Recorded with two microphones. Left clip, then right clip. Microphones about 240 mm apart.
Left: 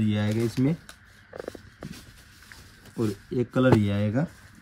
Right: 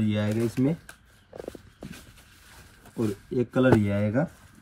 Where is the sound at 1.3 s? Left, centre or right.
Right.